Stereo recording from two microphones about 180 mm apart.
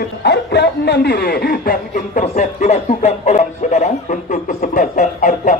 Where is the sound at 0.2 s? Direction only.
70° left (ahead or behind).